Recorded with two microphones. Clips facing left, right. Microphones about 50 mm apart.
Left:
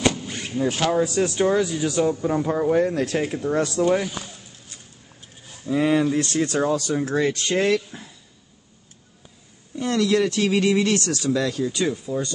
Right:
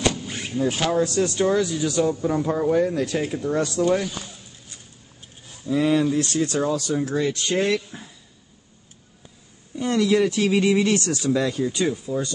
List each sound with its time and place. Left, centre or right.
0.7 s speech: centre
2.7 s speech: left
3.2 s speech: left
5.7 s speech: left
6.1 s speech: left
9.8 s speech: centre
11.9 s speech: centre